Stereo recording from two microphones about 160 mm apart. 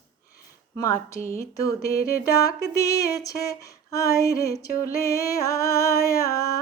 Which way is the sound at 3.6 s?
20° left (ahead or behind).